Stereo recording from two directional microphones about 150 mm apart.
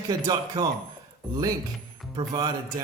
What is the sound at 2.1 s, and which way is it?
Speech, 30° right (ahead or behind).